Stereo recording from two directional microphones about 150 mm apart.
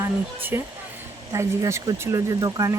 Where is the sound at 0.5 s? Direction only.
20° right (ahead or behind).